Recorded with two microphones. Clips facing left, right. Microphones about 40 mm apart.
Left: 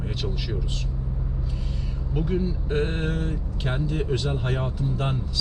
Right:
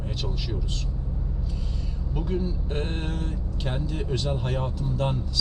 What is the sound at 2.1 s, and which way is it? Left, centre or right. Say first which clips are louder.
Speech: left 3 dB; left.